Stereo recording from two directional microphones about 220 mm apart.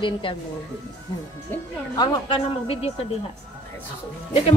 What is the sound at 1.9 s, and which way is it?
Speech, 25° left (ahead or behind).